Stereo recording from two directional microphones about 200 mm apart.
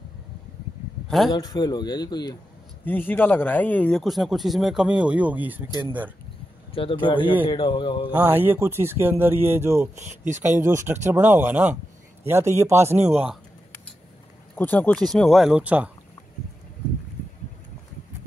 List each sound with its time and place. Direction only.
1.3 s speech: 20° left (ahead or behind)
2.8 s speech: 10° left (ahead or behind); by 5.7 s 10° right (ahead or behind)
6.7 s speech: 25° left (ahead or behind)
8.1 s speech: 10° right (ahead or behind)
9.9 s speech: 40° right (ahead or behind)
10.9 s speech: 10° right (ahead or behind)
12.9 s speech: 35° right (ahead or behind)
14.5 s speech: 10° left (ahead or behind); by 15.9 s 5° right (ahead or behind)